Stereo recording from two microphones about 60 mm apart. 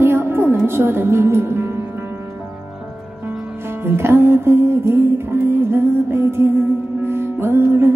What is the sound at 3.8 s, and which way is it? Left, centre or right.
Music, right.